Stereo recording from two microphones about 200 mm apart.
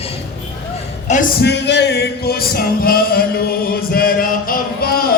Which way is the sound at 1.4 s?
60° left (ahead or behind).